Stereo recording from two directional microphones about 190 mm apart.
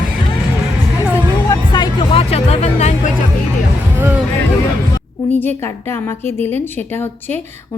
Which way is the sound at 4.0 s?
10° right (ahead or behind).